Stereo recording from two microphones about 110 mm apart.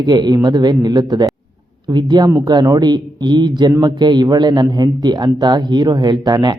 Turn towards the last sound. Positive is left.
turn(degrees=-40)  # may be behind; listen again after turning